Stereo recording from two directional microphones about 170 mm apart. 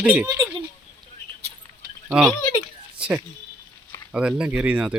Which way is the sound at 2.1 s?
5° right (ahead or behind).